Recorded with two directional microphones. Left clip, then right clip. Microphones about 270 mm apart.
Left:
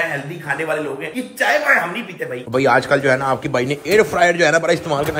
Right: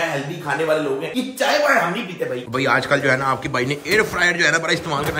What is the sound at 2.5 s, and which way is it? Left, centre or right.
A man's voice, centre.